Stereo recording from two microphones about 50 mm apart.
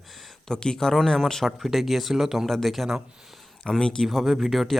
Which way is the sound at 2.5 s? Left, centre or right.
Centre.